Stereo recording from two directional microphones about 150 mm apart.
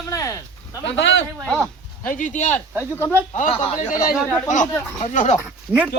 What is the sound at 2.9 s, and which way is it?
Speech, 15° left (ahead or behind).